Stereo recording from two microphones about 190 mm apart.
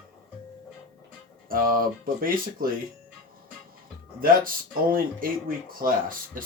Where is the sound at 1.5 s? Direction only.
50° right (ahead or behind).